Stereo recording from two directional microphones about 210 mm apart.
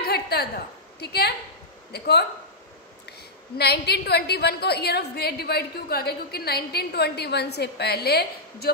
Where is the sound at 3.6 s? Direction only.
50° left (ahead or behind).